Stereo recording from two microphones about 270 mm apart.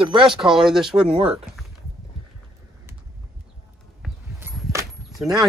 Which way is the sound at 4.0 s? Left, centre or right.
Centre.